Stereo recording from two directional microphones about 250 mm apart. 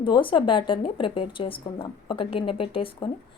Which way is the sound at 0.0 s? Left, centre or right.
Centre.